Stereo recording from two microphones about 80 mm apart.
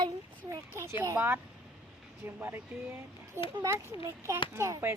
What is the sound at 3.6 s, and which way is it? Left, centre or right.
Speech, right.